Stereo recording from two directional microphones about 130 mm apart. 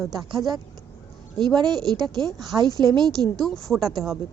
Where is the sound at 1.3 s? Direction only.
35° right (ahead or behind).